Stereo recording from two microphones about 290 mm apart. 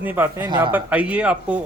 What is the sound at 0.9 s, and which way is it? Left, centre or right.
Speech, centre.